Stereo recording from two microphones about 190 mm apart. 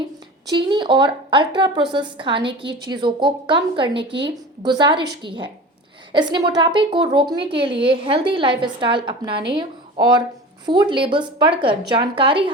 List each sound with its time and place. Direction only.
0.5 s a woman's voice: 25° right (ahead or behind)